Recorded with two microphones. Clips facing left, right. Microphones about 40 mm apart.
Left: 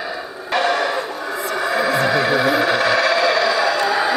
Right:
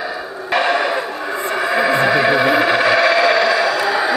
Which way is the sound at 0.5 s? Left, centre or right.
Right.